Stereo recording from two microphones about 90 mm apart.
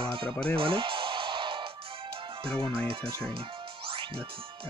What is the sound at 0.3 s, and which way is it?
Speech, 10° left (ahead or behind).